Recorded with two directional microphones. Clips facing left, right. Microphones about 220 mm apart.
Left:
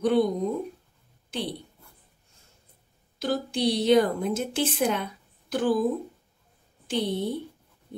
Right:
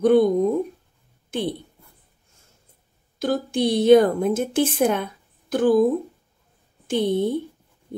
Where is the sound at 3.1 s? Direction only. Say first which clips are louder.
Right 5 dB; 50° right (ahead or behind).